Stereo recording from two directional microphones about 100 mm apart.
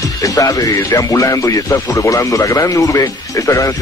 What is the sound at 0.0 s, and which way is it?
Speech, 35° left (ahead or behind).